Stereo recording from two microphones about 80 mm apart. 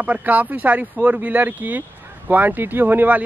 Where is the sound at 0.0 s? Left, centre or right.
Right.